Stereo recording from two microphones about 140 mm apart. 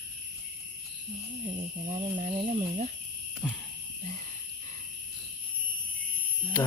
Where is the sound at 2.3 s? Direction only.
45° right (ahead or behind).